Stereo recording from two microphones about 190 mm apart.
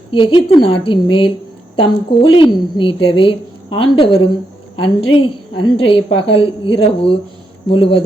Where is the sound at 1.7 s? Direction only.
30° left (ahead or behind).